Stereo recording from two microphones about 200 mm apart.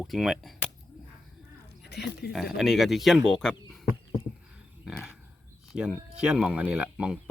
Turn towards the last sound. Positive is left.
turn(degrees=-5)  # may be behind; listen again after turning